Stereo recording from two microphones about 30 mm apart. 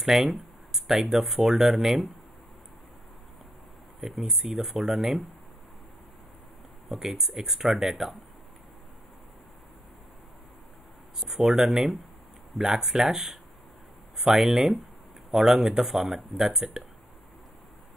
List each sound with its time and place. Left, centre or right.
0.0 s speech: centre
4.0 s speech: centre
6.9 s speech: centre
11.1 s speech: centre
16.3 s speech: centre